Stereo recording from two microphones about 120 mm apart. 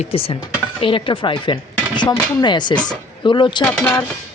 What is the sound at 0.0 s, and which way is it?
Speech, 55° left (ahead or behind).